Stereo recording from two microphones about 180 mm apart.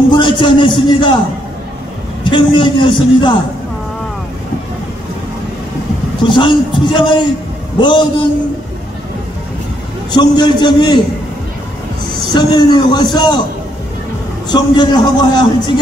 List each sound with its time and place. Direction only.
0.1 s a man's voice: 25° left (ahead or behind)
2.2 s a man's voice: 25° left (ahead or behind)
6.2 s a man's voice: 25° left (ahead or behind)
10.1 s a man's voice: 25° left (ahead or behind)
12.4 s a man's voice: 25° left (ahead or behind)
14.5 s a man's voice: 25° left (ahead or behind)